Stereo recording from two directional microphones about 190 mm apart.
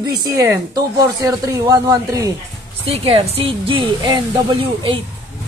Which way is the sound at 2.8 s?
30° right (ahead or behind).